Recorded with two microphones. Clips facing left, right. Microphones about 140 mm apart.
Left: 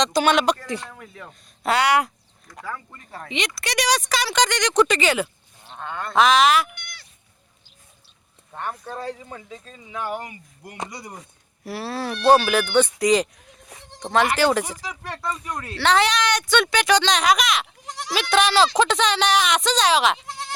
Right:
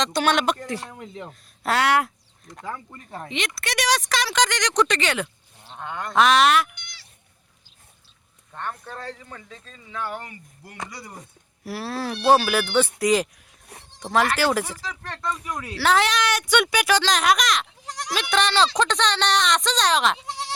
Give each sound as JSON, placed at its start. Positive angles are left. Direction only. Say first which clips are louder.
{"t": 0.0, "sound": "speech", "louder": "left 3 dB", "side_deg": 0}
{"t": 0.9, "sound": "speech", "louder": "right 4 dB", "side_deg": -25}
{"t": 1.3, "sound": "speech", "louder": "left 3 dB", "side_deg": 0}
{"t": 2.6, "sound": "speech", "louder": "even", "side_deg": -25}
{"t": 3.2, "sound": "speech", "louder": "left 2 dB", "side_deg": 0}
{"t": 5.8, "sound": "a sound", "louder": "left 1 dB", "side_deg": -15}
{"t": 6.1, "sound": "speech", "louder": "left 1 dB", "side_deg": 0}
{"t": 6.7, "sound": "a sound", "louder": "left 5 dB", "side_deg": 55}
{"t": 8.5, "sound": "speech", "louder": "left 2 dB", "side_deg": 5}
{"t": 11.6, "sound": "speech", "louder": "left 1 dB", "side_deg": 0}
{"t": 14.6, "sound": "speech", "louder": "left 1 dB", "side_deg": 15}
{"t": 15.4, "sound": "speech", "louder": "left 1 dB", "side_deg": -5}